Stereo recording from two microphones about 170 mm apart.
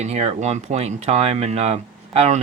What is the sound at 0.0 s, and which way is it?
Speech, 40° right (ahead or behind).